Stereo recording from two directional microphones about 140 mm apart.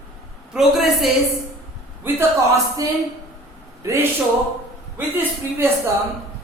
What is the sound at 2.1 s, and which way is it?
Speech, 20° right (ahead or behind).